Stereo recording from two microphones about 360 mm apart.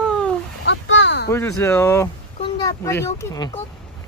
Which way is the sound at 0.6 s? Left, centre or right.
Left.